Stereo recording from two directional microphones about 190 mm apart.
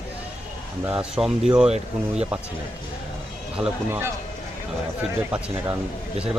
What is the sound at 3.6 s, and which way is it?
Speech, 10° right (ahead or behind).